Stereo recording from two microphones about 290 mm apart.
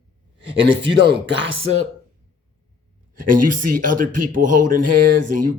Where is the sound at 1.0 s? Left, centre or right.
Right.